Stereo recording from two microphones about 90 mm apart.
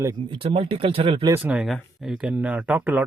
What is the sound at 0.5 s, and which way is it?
Speech, 85° right.